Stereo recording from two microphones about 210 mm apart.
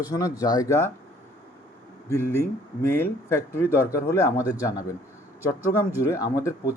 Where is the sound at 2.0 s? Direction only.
15° left (ahead or behind).